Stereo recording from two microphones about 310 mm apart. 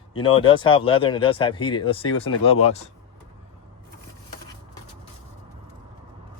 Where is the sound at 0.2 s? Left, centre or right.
Centre.